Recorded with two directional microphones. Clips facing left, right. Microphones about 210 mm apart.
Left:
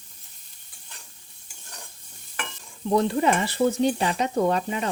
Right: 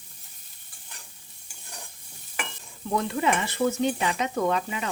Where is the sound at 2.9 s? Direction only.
35° left (ahead or behind).